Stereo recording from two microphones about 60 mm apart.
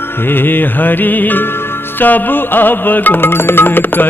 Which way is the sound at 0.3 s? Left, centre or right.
Left.